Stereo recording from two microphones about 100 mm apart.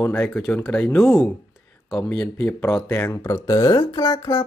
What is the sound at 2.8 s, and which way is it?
Speech, 30° left (ahead or behind).